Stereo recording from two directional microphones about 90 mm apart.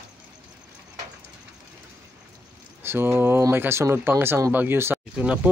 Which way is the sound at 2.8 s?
25° right (ahead or behind).